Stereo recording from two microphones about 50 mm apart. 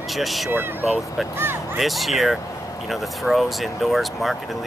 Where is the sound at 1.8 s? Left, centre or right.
Centre.